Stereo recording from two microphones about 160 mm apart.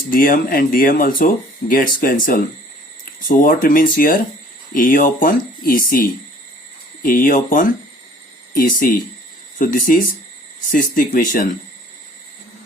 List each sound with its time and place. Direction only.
0.1 s speech: 60° left (ahead or behind)